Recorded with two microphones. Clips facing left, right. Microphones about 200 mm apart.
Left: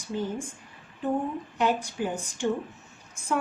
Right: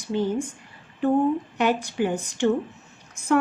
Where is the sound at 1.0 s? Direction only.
70° right (ahead or behind).